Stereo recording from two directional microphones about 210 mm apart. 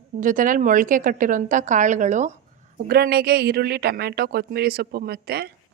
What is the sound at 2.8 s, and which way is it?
Speech, 45° right (ahead or behind).